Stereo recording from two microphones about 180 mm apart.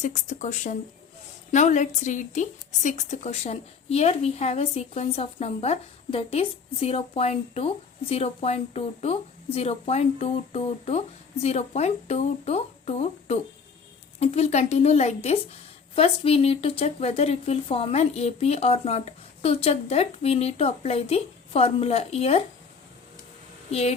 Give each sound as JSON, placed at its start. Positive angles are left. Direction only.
{"t": 0.0, "sound": "speech", "side_deg": 40}